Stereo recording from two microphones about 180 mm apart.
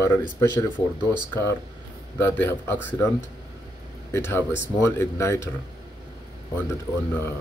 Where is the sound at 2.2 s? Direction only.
10° left (ahead or behind).